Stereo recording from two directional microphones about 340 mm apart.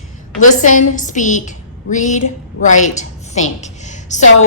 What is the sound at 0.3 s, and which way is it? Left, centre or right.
A woman's voice, left.